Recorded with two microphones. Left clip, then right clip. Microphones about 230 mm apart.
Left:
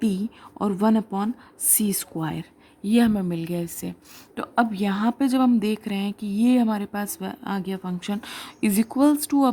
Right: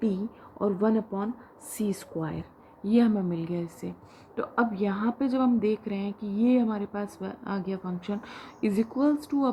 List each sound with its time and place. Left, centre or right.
0.0 s speech: left
4.4 s speech: left